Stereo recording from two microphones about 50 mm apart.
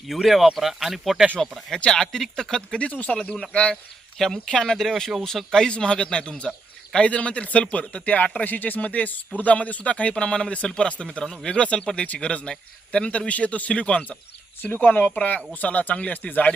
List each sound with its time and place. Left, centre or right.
0.1 s speech: centre
1.4 s a man's voice: centre
2.7 s a man's voice: left
3.2 s a man's voice: centre
5.6 s a man's voice: centre
8.4 s a man's voice: left
11.2 s a man's voice: centre
11.5 s a man's voice: left